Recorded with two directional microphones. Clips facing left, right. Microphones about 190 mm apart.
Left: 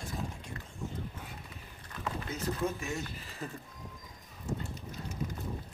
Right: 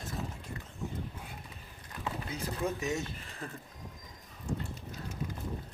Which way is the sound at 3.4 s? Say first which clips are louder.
Left 2 dB; 5° left (ahead or behind).